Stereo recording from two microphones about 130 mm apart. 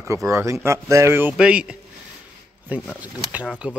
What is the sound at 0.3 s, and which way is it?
Speech, 20° right (ahead or behind).